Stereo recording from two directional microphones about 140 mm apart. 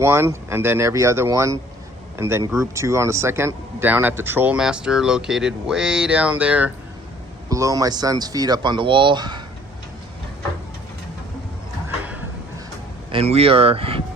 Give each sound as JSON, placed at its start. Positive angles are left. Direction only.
{"t": 0.0, "sound": "speech", "side_deg": -20}
{"t": 7.5, "sound": "speech", "side_deg": -25}
{"t": 13.1, "sound": "speech", "side_deg": -45}